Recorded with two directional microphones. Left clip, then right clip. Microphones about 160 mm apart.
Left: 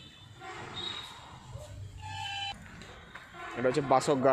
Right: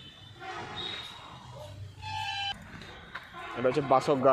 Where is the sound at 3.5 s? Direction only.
20° left (ahead or behind).